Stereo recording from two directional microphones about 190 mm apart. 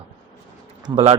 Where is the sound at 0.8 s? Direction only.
25° right (ahead or behind).